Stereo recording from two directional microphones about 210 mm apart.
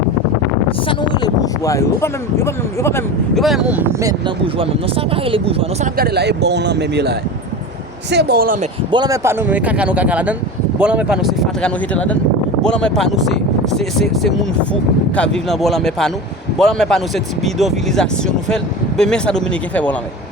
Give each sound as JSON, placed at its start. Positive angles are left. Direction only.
{"t": 0.9, "sound": "speech", "side_deg": 20}
{"t": 3.3, "sound": "speech", "side_deg": 0}
{"t": 4.5, "sound": "speech", "side_deg": -25}
{"t": 6.0, "sound": "speech", "side_deg": -50}
{"t": 8.9, "sound": "speech", "side_deg": -20}